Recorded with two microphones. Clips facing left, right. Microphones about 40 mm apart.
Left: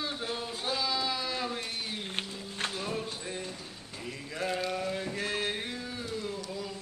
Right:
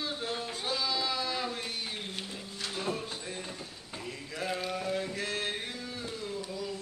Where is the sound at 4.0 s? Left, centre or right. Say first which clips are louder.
Left 2 dB; centre.